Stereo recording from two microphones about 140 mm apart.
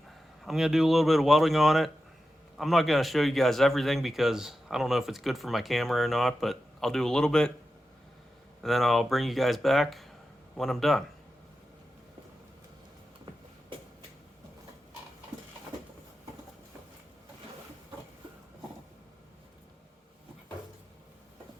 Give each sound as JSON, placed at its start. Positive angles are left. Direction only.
{"t": 0.4, "sound": "speech", "side_deg": -5}
{"t": 8.6, "sound": "speech", "side_deg": 0}
{"t": 13.7, "sound": "a sound", "side_deg": -40}